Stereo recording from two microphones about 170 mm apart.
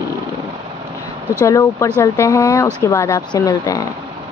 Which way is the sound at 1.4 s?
20° left (ahead or behind).